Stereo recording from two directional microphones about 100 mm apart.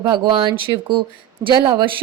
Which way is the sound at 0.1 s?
55° right (ahead or behind).